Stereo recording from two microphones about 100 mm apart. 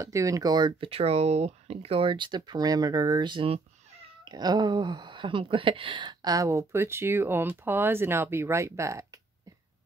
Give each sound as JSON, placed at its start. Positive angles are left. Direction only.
{"t": 0.0, "sound": "speech", "side_deg": -30}
{"t": 0.8, "sound": "speech", "side_deg": -80}
{"t": 6.3, "sound": "speech", "side_deg": -30}